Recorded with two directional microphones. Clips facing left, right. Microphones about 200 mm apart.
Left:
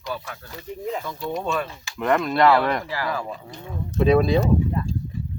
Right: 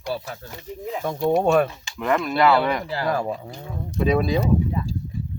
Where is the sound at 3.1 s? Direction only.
45° right (ahead or behind).